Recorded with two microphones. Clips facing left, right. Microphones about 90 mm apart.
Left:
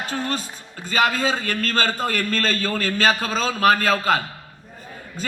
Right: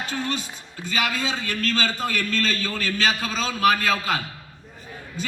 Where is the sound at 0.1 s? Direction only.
40° left (ahead or behind).